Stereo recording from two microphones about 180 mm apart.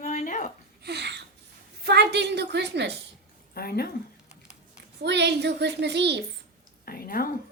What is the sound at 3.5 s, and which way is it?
Speech, 60° left (ahead or behind).